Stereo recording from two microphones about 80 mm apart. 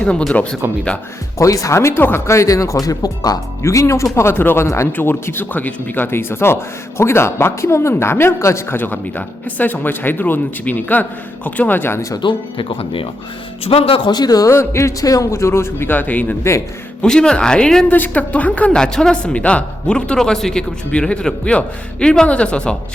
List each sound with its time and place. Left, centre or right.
0.0 s a woman's voice: centre
0.6 s speech: right
1.4 s speech: left
4.9 s speech: left
12.2 s speech: left
14.0 s a man's voice: left
14.5 s speech: left
16.4 s speech: left
17.0 s a woman's voice: centre
17.9 s a woman's voice: left